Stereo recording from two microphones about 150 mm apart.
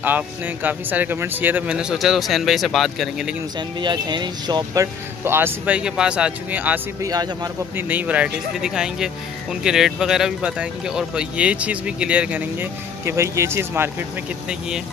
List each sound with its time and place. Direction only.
0.0 s speech: 10° right (ahead or behind)
3.5 s speech: 30° right (ahead or behind)
5.2 s speech: 15° right (ahead or behind)